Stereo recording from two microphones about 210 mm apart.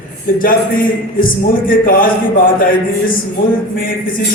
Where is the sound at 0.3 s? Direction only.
40° left (ahead or behind).